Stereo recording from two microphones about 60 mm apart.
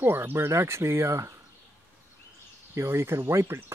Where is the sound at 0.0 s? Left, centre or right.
Right.